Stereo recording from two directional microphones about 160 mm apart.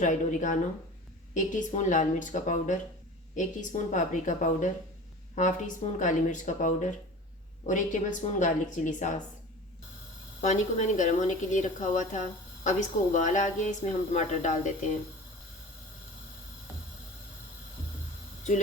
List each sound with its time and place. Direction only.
0.0 s a woman's voice: 50° left (ahead or behind)
10.4 s a woman's voice: 50° left (ahead or behind)